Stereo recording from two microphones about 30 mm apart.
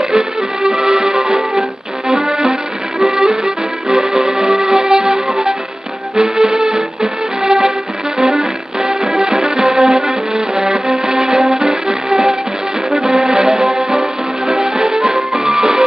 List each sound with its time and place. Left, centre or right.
0.0 s music: centre
2.2 s accordion: right
3.0 s music: centre
4.8 s violin: centre
6.1 s music: right
10.5 s music: centre
13.3 s music: right
13.6 s music: centre